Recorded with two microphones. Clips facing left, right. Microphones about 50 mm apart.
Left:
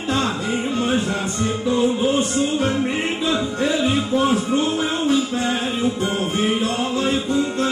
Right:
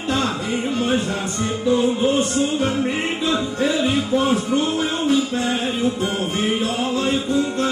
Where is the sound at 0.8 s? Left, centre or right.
Centre.